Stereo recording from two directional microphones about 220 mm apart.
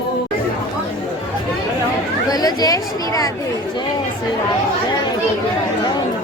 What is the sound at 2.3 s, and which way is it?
Speech, 15° left (ahead or behind).